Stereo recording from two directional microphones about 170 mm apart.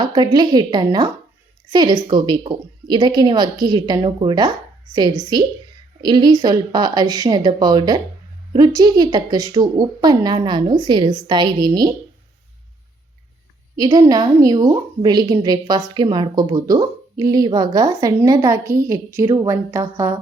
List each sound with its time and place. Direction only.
0.0 s speech: 25° right (ahead or behind)
6.0 s speech: 25° right (ahead or behind)
13.7 s speech: 20° right (ahead or behind)